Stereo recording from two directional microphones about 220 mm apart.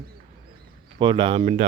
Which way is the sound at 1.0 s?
20° right (ahead or behind).